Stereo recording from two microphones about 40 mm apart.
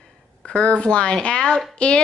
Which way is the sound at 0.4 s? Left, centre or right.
Left.